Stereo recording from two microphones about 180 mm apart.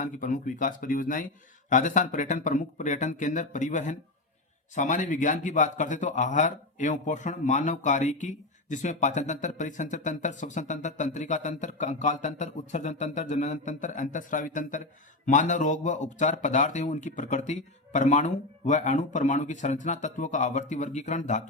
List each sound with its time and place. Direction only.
0.0 s a man's voice: 45° left (ahead or behind)